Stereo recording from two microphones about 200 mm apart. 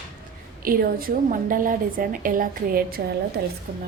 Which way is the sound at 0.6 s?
45° right (ahead or behind).